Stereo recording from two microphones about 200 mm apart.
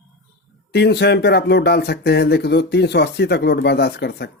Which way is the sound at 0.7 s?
55° left (ahead or behind).